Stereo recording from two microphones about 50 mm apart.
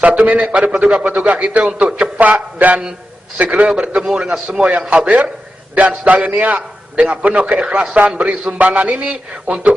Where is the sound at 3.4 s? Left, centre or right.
Right.